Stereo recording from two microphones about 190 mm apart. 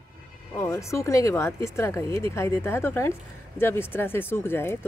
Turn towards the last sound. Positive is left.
turn(degrees=10)  # may be behind; listen again after turning